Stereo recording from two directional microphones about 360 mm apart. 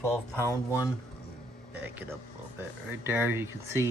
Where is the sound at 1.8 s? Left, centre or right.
Centre.